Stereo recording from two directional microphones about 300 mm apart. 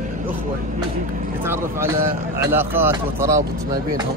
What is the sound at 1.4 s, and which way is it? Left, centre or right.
Speech, centre.